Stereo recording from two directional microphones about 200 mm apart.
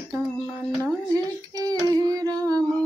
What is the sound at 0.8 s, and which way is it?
Child singing, 15° right (ahead or behind).